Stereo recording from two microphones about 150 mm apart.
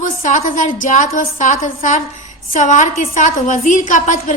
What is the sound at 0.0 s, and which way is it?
A woman's voice, 60° left (ahead or behind).